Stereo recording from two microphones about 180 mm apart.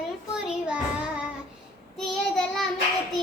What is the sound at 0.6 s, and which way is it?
Speech, 5° right (ahead or behind).